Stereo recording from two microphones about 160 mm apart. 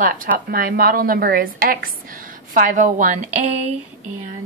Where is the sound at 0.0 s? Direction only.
60° right (ahead or behind).